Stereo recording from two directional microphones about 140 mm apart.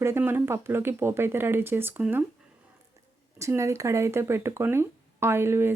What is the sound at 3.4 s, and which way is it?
Speech, 20° right (ahead or behind).